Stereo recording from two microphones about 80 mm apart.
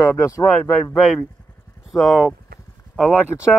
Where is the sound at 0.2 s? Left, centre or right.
Left.